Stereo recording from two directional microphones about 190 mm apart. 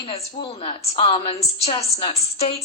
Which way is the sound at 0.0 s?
30° left (ahead or behind).